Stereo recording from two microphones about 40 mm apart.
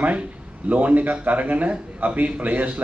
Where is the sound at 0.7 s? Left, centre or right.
Right.